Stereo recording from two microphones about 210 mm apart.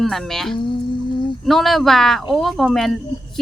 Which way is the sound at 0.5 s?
20° left (ahead or behind).